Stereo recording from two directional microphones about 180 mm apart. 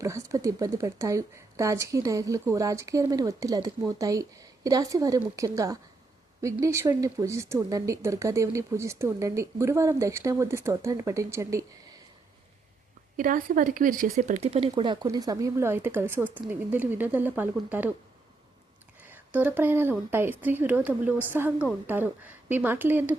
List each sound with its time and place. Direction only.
0.0 s speech: 15° right (ahead or behind)
13.1 s speech: 50° right (ahead or behind); by 17.9 s 10° right (ahead or behind)
19.1 s speech: 10° right (ahead or behind)